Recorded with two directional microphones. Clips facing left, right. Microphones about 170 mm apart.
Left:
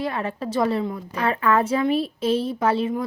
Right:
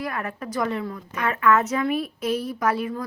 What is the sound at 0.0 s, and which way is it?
A woman's voice, 25° left (ahead or behind).